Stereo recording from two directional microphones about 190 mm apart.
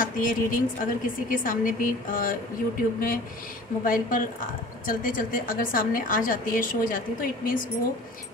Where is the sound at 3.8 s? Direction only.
45° left (ahead or behind).